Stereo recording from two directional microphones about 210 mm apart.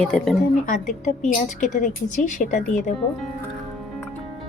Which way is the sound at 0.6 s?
35° left (ahead or behind).